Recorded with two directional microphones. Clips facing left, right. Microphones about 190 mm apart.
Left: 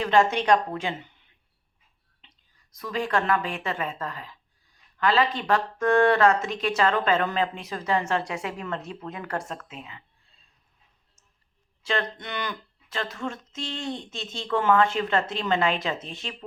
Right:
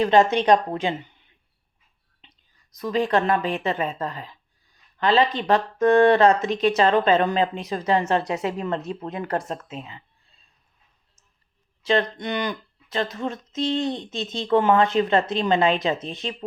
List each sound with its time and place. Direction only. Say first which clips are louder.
0.1 s speech: even; 20° right (ahead or behind)
2.2 s whispering: right 4 dB; 15° right (ahead or behind)
2.8 s speech: right 5 dB; 20° right (ahead or behind)
8.3 s speech: right 6 dB; 35° right (ahead or behind)
11.8 s speech: right 7 dB; 20° right (ahead or behind)